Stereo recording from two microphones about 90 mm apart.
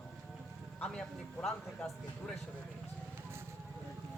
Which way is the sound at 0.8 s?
10° left (ahead or behind).